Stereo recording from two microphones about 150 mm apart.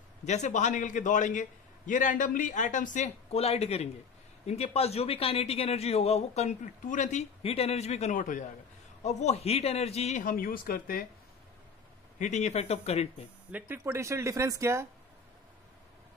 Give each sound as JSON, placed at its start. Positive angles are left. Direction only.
{"t": 0.2, "sound": "a man's voice", "side_deg": 50}
{"t": 9.0, "sound": "a man's voice", "side_deg": 45}
{"t": 10.2, "sound": "speech", "side_deg": 70}
{"t": 12.2, "sound": "a man's voice", "side_deg": 50}
{"t": 13.5, "sound": "speech", "side_deg": -10}